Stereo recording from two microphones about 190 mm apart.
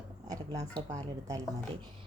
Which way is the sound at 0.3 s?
20° right (ahead or behind).